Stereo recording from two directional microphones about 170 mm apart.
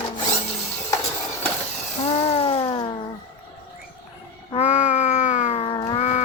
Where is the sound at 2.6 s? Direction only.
25° left (ahead or behind).